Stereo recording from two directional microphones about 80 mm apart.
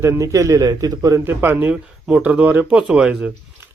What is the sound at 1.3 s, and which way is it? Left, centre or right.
Speech, right.